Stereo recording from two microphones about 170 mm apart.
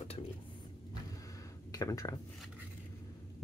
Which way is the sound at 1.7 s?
20° left (ahead or behind).